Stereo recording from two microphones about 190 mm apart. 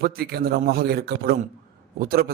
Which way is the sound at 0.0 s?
55° right (ahead or behind).